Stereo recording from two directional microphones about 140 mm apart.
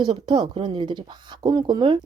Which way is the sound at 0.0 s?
30° right (ahead or behind).